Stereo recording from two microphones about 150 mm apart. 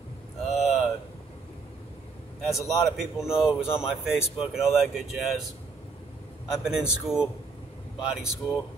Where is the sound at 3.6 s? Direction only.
15° left (ahead or behind).